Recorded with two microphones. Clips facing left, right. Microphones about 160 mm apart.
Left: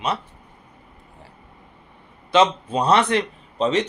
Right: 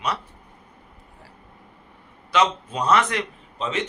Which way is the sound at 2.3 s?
30° left (ahead or behind).